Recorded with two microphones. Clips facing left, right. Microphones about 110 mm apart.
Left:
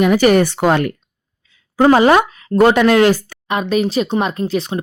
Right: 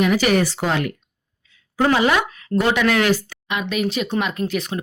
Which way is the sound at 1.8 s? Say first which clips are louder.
Left 7 dB; 40° left (ahead or behind).